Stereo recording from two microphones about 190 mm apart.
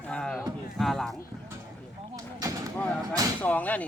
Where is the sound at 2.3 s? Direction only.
20° right (ahead or behind).